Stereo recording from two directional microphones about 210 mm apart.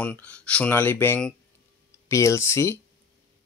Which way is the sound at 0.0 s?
5° left (ahead or behind).